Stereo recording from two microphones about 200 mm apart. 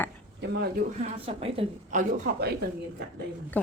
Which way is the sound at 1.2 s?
30° right (ahead or behind).